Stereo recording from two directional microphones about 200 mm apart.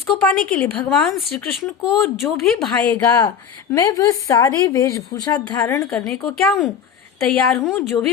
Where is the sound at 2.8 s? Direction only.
15° left (ahead or behind).